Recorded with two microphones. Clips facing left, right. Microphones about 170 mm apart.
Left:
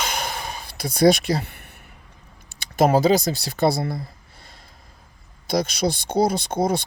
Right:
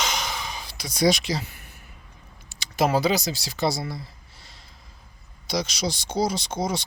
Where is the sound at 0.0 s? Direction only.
55° left (ahead or behind).